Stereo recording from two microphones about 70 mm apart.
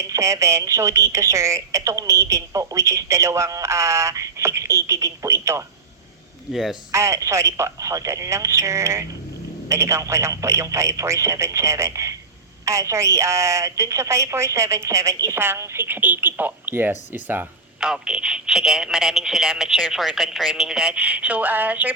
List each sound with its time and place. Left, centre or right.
0.1 s a woman's voice: right
6.5 s speech: centre
6.9 s a woman's voice: right
15.4 s a woman's voice: right
17.7 s speech: centre